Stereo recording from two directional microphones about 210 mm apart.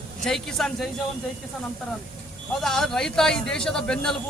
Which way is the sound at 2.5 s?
Centre (ahead or behind).